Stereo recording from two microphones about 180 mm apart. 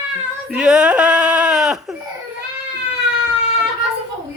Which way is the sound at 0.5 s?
5° right (ahead or behind).